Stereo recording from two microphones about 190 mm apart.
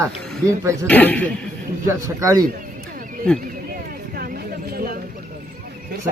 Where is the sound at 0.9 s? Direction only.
10° left (ahead or behind).